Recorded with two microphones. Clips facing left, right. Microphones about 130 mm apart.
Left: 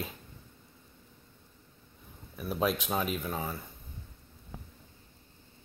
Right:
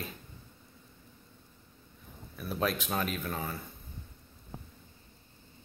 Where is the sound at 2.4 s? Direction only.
10° left (ahead or behind).